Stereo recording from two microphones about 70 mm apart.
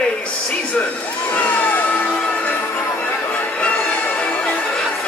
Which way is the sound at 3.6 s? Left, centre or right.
Centre.